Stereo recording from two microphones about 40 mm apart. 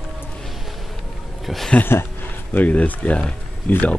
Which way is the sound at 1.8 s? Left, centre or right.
Left.